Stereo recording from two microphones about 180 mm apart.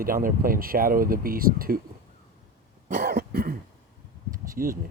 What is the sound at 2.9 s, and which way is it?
Cough, 55° right (ahead or behind).